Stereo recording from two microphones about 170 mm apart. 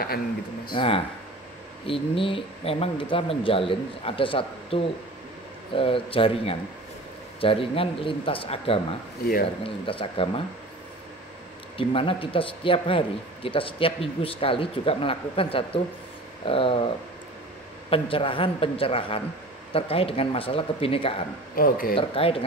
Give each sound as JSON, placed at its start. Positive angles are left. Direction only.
{"t": 0.7, "sound": "speech", "side_deg": 35}
{"t": 9.2, "sound": "speech", "side_deg": 60}
{"t": 9.6, "sound": "speech", "side_deg": 30}
{"t": 11.7, "sound": "speech", "side_deg": 30}
{"t": 21.5, "sound": "speech", "side_deg": 60}
{"t": 21.9, "sound": "speech", "side_deg": 35}